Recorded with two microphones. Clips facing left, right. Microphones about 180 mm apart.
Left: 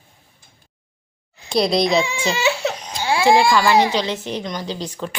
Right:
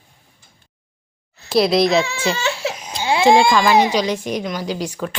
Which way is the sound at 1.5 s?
5° right (ahead or behind).